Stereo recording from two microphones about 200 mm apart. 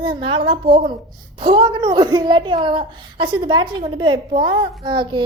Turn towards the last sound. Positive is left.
turn(degrees=-25)  # may be behind; listen again after turning